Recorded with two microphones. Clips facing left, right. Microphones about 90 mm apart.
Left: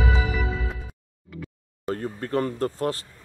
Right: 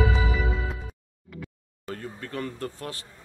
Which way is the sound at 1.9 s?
40° left (ahead or behind).